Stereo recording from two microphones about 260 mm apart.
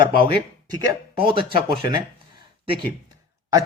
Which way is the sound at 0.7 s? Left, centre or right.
Centre.